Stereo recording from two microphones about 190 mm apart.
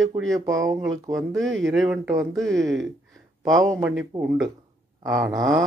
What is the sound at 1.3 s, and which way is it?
Speech, centre (ahead or behind).